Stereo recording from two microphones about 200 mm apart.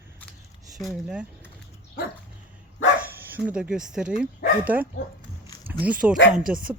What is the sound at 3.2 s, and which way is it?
Speech, 10° right (ahead or behind).